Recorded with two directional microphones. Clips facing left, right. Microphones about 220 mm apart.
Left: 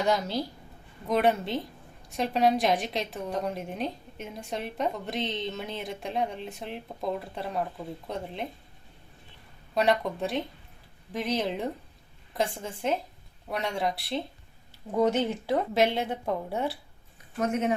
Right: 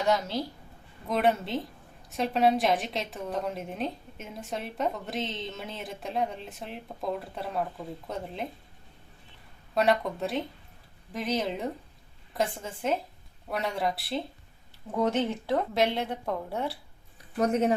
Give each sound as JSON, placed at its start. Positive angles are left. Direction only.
{"t": 0.0, "sound": "a woman's voice", "side_deg": 0}
{"t": 9.7, "sound": "a woman's voice", "side_deg": 0}
{"t": 17.4, "sound": "speech", "side_deg": -35}